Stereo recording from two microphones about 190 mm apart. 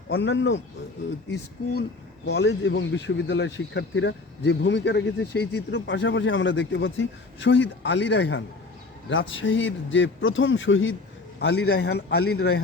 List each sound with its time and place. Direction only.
0.1 s speech: 70° left (ahead or behind)
2.2 s a man's voice: 65° left (ahead or behind); by 10.9 s 85° left
11.3 s a man's voice: 60° left (ahead or behind)